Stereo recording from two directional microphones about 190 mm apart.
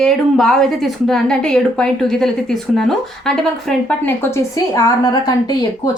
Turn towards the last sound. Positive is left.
turn(degrees=20)  # may be behind; listen again after turning